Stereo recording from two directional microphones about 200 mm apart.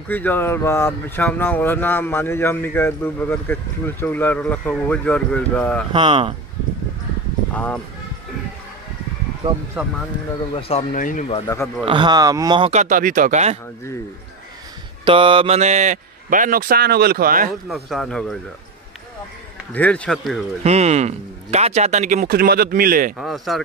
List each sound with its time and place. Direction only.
0.1 s speech: 10° left (ahead or behind)
5.9 s speech: 25° right (ahead or behind)
7.5 s speech: 5° left (ahead or behind)
10.5 s speech: 35° left (ahead or behind)
11.4 s speech: 15° left (ahead or behind)
11.8 s speech: 25° right (ahead or behind)
15.0 s speech: 25° right (ahead or behind); by 17.5 s 45° right (ahead or behind)
17.6 s a man's voice: centre (ahead or behind)
19.7 s a man's voice: 5° left (ahead or behind)
20.6 s speech: 35° right (ahead or behind)
23.1 s a man's voice: centre (ahead or behind)